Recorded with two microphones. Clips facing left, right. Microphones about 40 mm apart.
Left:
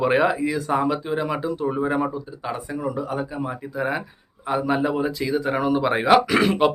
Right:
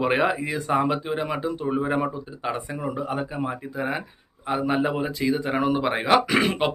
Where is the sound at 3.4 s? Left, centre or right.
Centre.